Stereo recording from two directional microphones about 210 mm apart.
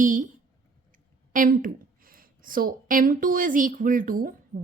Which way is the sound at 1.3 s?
40° right (ahead or behind).